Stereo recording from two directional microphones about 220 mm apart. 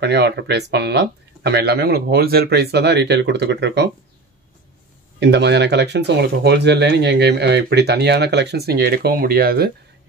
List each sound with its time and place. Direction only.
0.0 s speech: 50° right (ahead or behind)
5.2 s speech: 50° right (ahead or behind)